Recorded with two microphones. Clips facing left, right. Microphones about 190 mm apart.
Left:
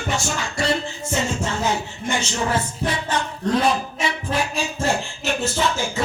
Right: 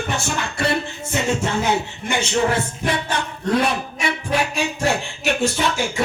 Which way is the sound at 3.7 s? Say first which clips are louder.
Even; 65° right (ahead or behind).